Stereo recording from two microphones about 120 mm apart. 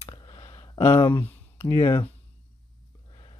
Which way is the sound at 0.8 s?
20° left (ahead or behind).